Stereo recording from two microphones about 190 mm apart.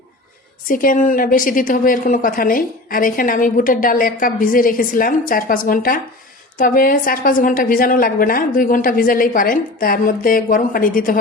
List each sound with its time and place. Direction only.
0.7 s a woman's voice: 45° left (ahead or behind)